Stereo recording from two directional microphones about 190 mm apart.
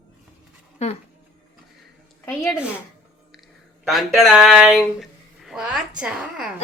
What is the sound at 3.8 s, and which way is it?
Speech, centre (ahead or behind).